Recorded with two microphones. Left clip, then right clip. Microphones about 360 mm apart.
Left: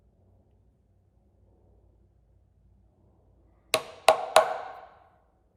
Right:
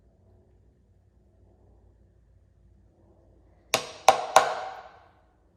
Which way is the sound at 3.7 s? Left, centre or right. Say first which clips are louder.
Right 1 dB; centre.